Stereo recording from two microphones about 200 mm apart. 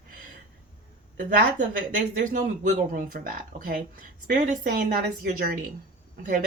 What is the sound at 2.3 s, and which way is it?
Speech, 40° right (ahead or behind).